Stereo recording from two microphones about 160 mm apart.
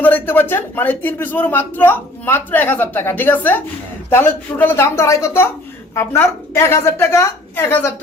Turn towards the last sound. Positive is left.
turn(degrees=15)  # may be behind; listen again after turning